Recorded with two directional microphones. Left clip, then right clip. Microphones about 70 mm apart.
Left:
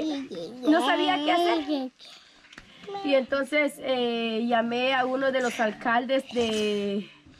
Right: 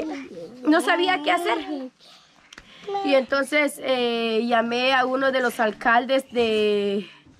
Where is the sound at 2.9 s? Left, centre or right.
Centre.